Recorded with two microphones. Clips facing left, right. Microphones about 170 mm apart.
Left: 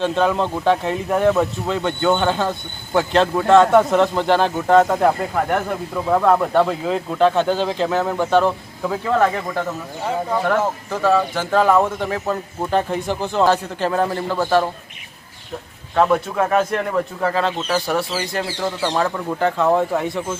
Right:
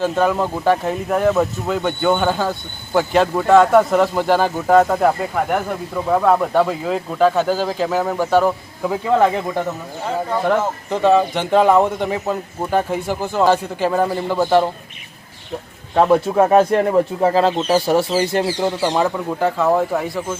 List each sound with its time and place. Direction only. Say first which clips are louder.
0.0 s speech: right 1 dB; 5° right (ahead or behind)
16.0 s speech: right 4 dB; 25° right (ahead or behind)
18.8 s speech: right 2 dB; 15° right (ahead or behind)